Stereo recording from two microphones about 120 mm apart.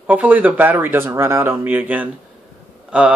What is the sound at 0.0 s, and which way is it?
Speech, 15° right (ahead or behind).